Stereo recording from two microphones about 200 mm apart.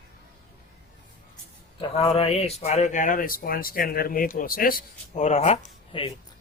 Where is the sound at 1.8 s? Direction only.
30° left (ahead or behind).